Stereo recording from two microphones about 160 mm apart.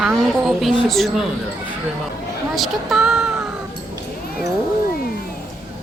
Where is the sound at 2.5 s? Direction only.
Centre (ahead or behind).